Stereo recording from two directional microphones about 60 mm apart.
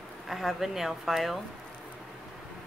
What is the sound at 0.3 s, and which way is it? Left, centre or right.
Speech, centre.